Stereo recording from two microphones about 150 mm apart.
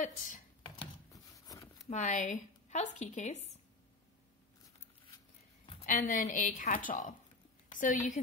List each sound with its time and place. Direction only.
1.1 s a sound: 20° left (ahead or behind)
1.9 s speech: 55° left (ahead or behind)
5.9 s a woman's voice: 65° left (ahead or behind)